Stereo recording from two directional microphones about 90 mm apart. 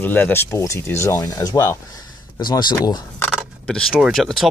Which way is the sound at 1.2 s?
45° left (ahead or behind).